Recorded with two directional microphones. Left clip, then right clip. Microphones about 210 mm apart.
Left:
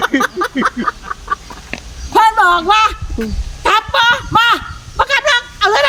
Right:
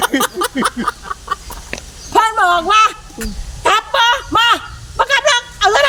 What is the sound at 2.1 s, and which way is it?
Speech, centre (ahead or behind).